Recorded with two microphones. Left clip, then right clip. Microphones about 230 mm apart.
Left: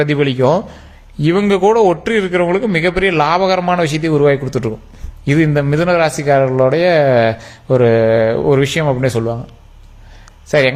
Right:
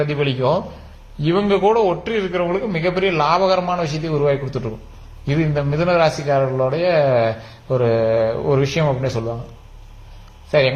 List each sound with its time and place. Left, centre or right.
0.0 s a man's voice: left